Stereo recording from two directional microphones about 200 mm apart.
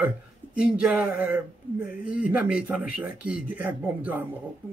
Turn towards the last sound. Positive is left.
turn(degrees=-10)  # may be behind; listen again after turning